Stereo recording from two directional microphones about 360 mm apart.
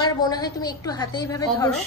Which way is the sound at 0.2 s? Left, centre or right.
Centre.